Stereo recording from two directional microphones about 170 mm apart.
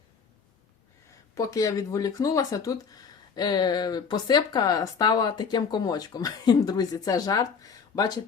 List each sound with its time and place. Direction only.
1.4 s speech: 20° left (ahead or behind)